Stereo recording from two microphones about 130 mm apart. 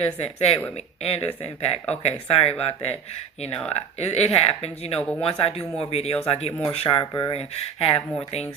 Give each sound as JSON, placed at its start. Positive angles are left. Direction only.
{"t": 0.0, "sound": "speech", "side_deg": 55}
{"t": 4.0, "sound": "speech", "side_deg": 55}
{"t": 6.7, "sound": "speech", "side_deg": 40}